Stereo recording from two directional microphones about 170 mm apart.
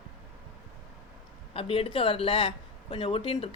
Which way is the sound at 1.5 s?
35° left (ahead or behind).